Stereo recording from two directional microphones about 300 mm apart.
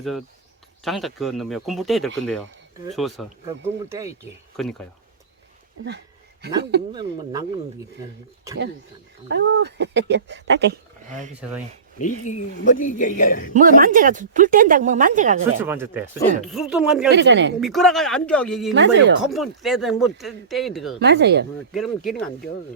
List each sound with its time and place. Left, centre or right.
0.9 s speech: centre
4.5 s speech: centre
6.6 s speech: right
9.3 s speech: right
11.9 s speech: left
13.5 s speech: right
15.6 s speech: centre
17.1 s speech: right
17.6 s speech: centre
18.7 s speech: right
19.2 s speech: centre
21.0 s speech: right
21.7 s speech: centre